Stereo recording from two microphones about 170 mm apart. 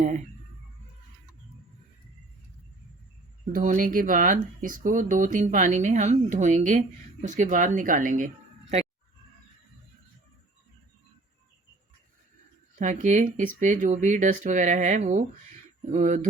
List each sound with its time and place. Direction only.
3.5 s speech: 50° right (ahead or behind)
12.8 s speech: 45° right (ahead or behind)